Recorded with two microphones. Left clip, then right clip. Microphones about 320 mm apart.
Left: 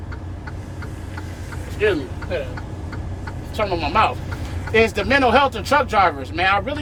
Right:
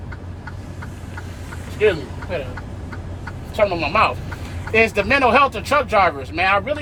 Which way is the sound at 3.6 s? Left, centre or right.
Centre.